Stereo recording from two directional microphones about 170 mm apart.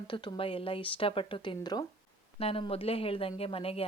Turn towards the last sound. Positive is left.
turn(degrees=35)  # may be behind; listen again after turning